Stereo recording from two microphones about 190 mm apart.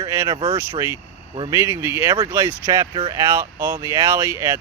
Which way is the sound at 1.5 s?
15° right (ahead or behind).